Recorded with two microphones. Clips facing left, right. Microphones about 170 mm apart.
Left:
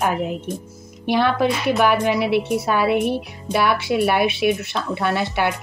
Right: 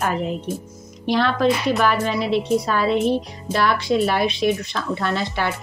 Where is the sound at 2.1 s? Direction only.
65° left (ahead or behind).